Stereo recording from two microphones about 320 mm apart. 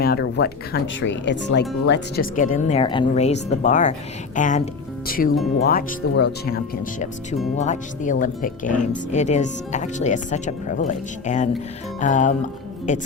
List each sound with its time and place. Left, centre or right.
0.0 s speech: left